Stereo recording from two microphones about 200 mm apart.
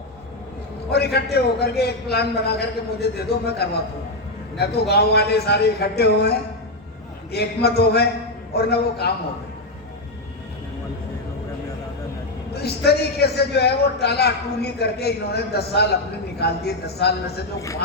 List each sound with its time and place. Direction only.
0.9 s a man's voice: 55° left (ahead or behind)
12.5 s a man's voice: 55° left (ahead or behind)